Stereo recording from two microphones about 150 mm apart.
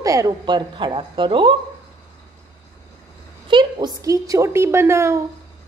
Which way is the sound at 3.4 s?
30° right (ahead or behind).